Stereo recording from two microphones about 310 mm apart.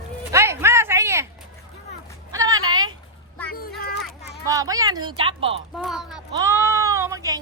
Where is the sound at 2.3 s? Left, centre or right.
Centre.